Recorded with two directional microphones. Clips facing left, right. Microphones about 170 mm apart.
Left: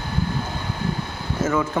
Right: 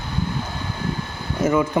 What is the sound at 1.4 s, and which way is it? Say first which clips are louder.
Speech: right 3 dB; 15° right (ahead or behind).